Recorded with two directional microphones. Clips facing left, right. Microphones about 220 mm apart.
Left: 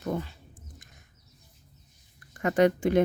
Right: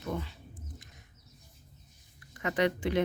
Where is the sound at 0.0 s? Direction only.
45° left (ahead or behind).